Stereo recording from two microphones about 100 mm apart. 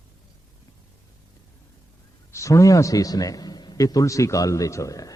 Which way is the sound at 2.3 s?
30° left (ahead or behind).